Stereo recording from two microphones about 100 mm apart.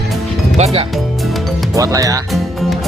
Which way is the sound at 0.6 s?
90° right.